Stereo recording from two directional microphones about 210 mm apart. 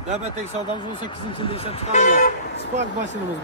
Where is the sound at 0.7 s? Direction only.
20° left (ahead or behind).